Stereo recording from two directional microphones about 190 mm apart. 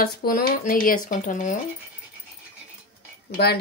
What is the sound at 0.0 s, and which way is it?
Speech, 50° left (ahead or behind).